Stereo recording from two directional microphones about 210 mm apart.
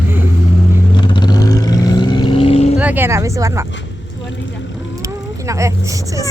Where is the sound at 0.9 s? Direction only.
20° left (ahead or behind).